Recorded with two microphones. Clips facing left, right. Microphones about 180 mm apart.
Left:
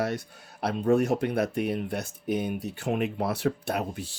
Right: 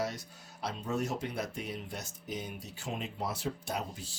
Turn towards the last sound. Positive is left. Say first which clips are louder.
# left 7 dB
turn(degrees=60)  # may be behind; listen again after turning